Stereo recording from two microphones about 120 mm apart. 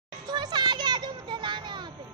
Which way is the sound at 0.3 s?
35° right (ahead or behind).